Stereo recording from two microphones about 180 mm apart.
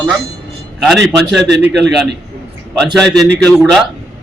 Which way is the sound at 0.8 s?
Centre (ahead or behind).